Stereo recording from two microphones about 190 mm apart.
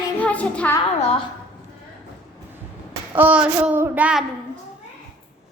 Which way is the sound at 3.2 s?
5° right (ahead or behind).